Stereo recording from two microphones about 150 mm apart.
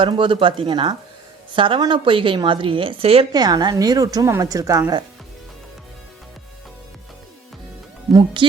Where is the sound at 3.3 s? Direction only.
25° right (ahead or behind).